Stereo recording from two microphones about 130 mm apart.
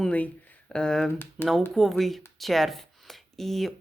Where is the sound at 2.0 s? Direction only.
Centre (ahead or behind).